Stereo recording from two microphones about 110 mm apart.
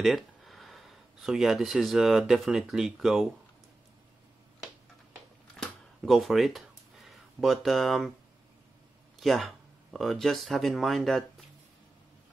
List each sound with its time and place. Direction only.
0.0 s speech: centre (ahead or behind)
5.6 s a sound: centre (ahead or behind)
9.2 s speech: centre (ahead or behind)